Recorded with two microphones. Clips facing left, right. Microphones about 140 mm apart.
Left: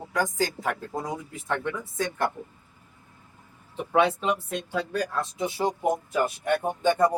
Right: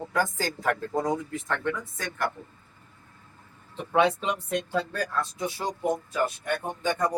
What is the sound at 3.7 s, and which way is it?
Speech, 10° left (ahead or behind).